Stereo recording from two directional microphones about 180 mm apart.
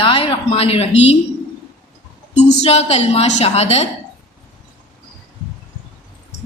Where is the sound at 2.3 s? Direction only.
35° left (ahead or behind).